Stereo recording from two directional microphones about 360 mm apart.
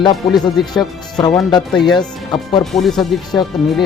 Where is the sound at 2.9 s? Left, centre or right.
Centre.